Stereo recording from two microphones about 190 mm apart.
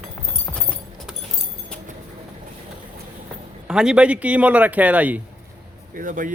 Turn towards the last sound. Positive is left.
turn(degrees=-45)  # may be behind; listen again after turning